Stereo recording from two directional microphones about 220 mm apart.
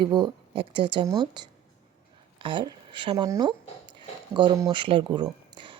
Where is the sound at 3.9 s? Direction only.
20° right (ahead or behind).